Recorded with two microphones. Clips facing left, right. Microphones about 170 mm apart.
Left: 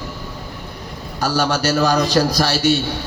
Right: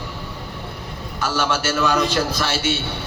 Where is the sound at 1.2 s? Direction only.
35° left (ahead or behind).